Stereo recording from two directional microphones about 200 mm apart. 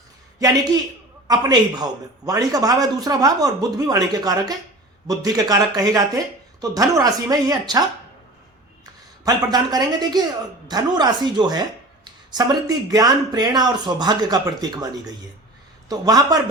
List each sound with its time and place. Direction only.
0.3 s a man's voice: 20° right (ahead or behind)
9.2 s a man's voice: 20° right (ahead or behind)